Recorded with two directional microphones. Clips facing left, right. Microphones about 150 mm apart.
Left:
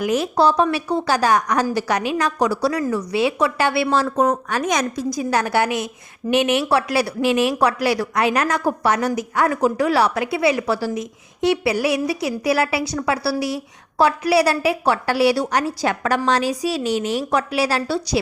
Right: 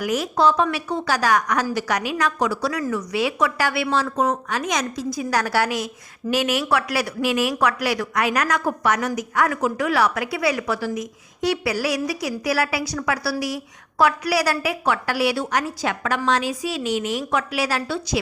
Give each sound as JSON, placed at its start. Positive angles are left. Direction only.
{"t": 0.0, "sound": "a woman's voice", "side_deg": 30}
{"t": 3.8, "sound": "a woman's voice", "side_deg": 45}
{"t": 5.3, "sound": "a woman's voice", "side_deg": 20}